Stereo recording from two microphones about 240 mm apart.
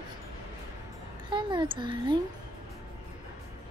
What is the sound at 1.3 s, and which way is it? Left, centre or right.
Speech, centre.